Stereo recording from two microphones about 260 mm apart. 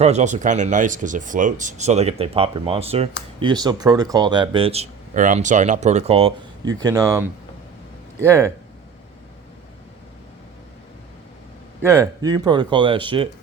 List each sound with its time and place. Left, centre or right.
0.0 s speech: right; by 8.5 s centre
11.8 s speech: centre